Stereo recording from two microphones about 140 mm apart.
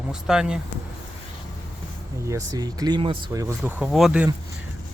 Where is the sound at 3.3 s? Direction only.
25° right (ahead or behind).